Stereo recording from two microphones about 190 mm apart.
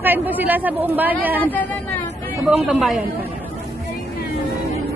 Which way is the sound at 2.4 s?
5° right (ahead or behind).